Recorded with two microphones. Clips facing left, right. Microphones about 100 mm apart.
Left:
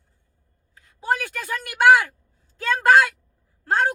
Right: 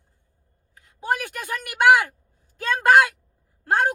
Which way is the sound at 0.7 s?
15° right (ahead or behind).